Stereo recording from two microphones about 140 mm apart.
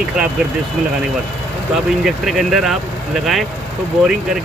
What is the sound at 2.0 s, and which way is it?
Speech, 5° right (ahead or behind).